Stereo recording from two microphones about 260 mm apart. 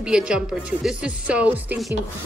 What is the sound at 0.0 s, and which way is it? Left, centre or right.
Speech, centre.